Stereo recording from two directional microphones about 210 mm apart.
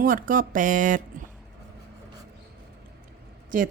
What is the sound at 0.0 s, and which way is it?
A woman's voice, 40° right (ahead or behind).